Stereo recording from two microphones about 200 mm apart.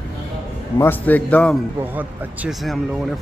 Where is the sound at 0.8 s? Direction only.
10° left (ahead or behind).